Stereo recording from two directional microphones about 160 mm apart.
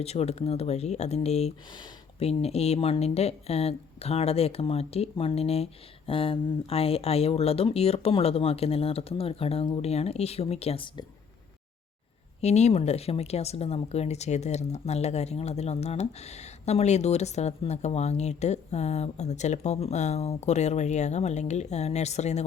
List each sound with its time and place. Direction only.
0.0 s speech: 40° left (ahead or behind)
12.4 s speech: 45° left (ahead or behind)